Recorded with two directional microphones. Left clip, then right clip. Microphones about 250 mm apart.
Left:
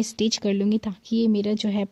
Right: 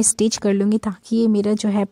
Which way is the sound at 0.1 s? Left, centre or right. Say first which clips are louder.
Right 5 dB; right.